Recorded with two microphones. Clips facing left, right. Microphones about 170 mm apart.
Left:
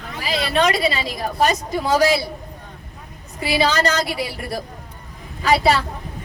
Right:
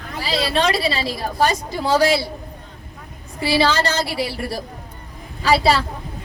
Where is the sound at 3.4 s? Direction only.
30° right (ahead or behind).